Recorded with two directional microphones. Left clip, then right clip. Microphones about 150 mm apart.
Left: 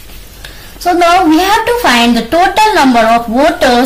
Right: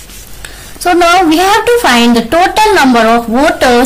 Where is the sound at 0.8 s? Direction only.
50° right (ahead or behind).